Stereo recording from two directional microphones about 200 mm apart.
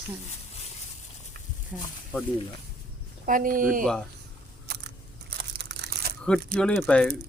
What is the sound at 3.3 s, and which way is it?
Speech, 45° right (ahead or behind).